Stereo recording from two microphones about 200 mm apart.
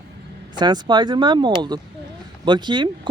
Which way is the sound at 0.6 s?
20° right (ahead or behind).